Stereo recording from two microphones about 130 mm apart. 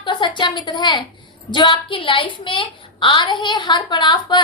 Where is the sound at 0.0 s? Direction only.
35° left (ahead or behind).